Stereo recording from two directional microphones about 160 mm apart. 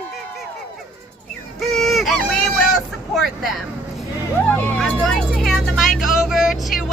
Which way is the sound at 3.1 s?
Centre (ahead or behind).